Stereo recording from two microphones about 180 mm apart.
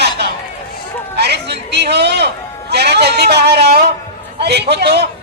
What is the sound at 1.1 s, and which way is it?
A man's voice, 65° right (ahead or behind).